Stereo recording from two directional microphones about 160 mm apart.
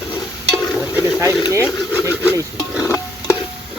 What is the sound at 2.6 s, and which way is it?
Stir, 20° left (ahead or behind).